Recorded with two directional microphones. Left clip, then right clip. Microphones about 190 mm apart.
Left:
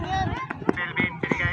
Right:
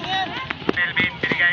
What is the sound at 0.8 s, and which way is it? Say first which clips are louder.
Clip-clop: right 6 dB; 25° right (ahead or behind).